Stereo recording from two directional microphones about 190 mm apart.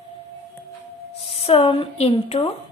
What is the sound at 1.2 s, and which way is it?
Speech, 30° left (ahead or behind).